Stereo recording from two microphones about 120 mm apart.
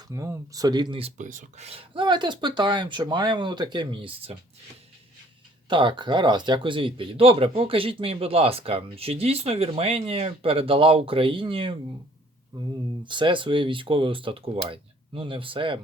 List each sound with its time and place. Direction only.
0.1 s speech: 25° right (ahead or behind)
1.2 s speech: 90° right; by 4.4 s 50° right (ahead or behind)
5.6 s speech: 40° right (ahead or behind)